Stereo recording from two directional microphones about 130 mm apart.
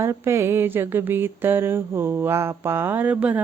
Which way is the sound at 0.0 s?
20° right (ahead or behind).